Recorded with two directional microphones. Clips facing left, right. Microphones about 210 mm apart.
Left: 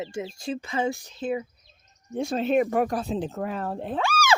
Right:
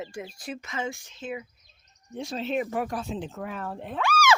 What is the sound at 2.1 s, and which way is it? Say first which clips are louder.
Speech: left 6 dB; 50° left (ahead or behind).